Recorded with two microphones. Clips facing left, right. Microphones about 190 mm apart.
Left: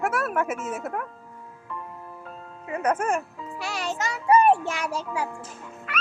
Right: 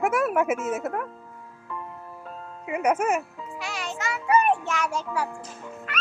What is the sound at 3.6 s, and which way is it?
Music, 35° left (ahead or behind).